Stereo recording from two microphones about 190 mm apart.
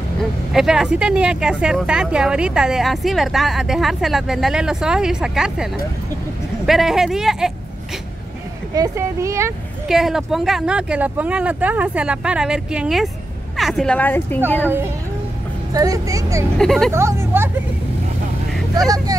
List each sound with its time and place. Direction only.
0.2 s speech: centre (ahead or behind)
8.7 s speech: 15° right (ahead or behind)
9.8 s a woman's voice: centre (ahead or behind)
15.7 s a woman's voice: 20° right (ahead or behind)
16.5 s speech: centre (ahead or behind)
16.9 s speech: 15° right (ahead or behind)